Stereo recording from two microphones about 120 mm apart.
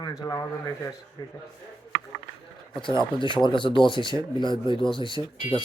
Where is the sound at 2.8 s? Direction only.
40° left (ahead or behind).